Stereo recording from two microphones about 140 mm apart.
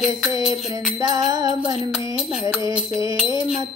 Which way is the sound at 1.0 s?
30° right (ahead or behind).